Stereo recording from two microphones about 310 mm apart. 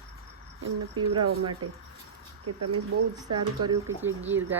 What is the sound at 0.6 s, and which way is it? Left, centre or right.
Speech, right.